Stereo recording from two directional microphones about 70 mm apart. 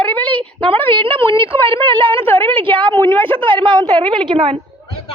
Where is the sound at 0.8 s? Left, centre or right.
Left.